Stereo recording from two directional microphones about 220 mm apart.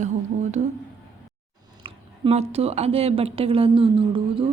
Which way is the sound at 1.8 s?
25° right (ahead or behind).